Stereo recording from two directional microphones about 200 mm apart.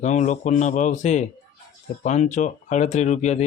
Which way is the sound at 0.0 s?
35° left (ahead or behind).